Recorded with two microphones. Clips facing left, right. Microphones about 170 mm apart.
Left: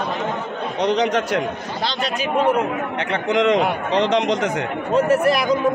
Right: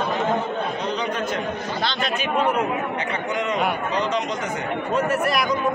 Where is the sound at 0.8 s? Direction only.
80° left.